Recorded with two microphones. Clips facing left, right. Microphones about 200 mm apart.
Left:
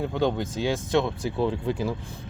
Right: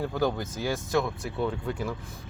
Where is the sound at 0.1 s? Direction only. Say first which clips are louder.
Left 3 dB; 25° left (ahead or behind).